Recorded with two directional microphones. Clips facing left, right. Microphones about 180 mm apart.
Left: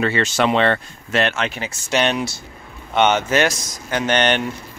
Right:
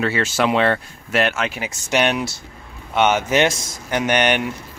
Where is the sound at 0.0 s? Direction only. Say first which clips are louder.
Left 1 dB; 5° right (ahead or behind); by 4.0 s 25° right (ahead or behind).